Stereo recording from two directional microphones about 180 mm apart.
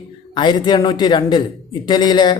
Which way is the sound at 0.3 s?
25° left (ahead or behind).